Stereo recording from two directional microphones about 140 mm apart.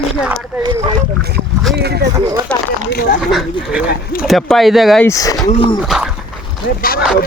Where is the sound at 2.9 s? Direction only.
90° left.